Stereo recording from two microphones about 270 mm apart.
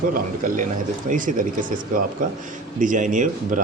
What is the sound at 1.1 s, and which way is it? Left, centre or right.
Speech, right.